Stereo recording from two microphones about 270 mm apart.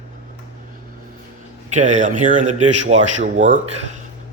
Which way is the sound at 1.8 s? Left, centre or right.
Right.